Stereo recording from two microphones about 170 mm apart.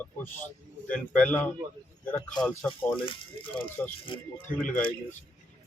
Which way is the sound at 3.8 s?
10° left (ahead or behind).